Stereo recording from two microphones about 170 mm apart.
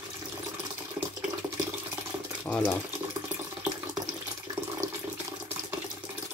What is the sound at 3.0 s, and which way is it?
Water tap, 15° right (ahead or behind).